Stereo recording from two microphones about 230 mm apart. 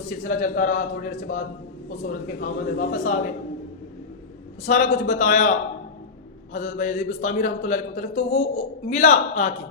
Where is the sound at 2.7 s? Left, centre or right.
Left.